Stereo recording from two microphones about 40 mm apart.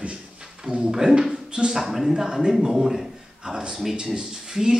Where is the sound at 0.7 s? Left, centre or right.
Right.